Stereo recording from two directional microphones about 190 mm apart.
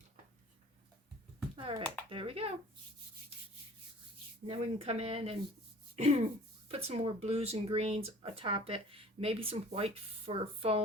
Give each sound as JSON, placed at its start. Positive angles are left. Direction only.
{"t": 1.5, "sound": "speech", "side_deg": -30}
{"t": 4.4, "sound": "speech", "side_deg": -30}